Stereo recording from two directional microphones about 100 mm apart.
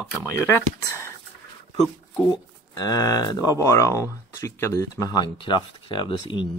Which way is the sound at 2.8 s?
35° left (ahead or behind).